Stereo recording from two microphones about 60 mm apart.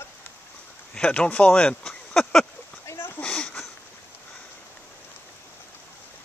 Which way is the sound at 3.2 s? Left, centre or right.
Centre.